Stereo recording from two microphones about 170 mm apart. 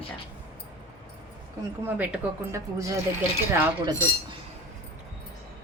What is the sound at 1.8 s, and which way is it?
Speech, 10° right (ahead or behind).